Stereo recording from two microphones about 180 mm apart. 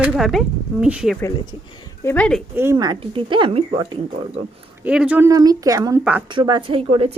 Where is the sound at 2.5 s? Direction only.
15° right (ahead or behind); by 4.4 s 35° right (ahead or behind).